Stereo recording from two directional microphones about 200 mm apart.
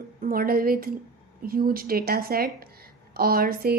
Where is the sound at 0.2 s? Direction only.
45° right (ahead or behind).